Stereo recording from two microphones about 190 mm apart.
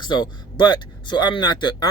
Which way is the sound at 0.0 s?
25° left (ahead or behind).